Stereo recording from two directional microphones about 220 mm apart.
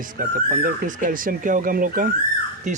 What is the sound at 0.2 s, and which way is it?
Speech, 40° right (ahead or behind).